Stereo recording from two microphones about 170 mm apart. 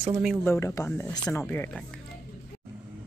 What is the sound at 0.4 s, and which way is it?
Speech, 15° left (ahead or behind).